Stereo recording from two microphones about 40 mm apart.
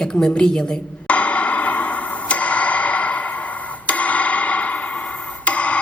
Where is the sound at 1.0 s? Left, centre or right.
Left.